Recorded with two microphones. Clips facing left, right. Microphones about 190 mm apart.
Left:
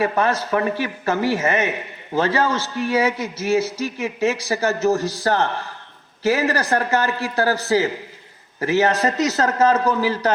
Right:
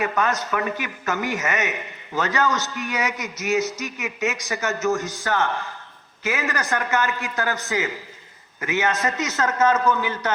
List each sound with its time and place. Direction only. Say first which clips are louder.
0.0 s a man's voice: left 4 dB; 30° left (ahead or behind)